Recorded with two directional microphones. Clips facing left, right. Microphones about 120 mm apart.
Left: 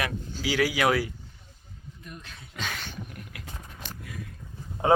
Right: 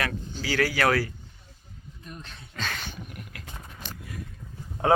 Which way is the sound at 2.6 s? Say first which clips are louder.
Right 1 dB; 15° left (ahead or behind).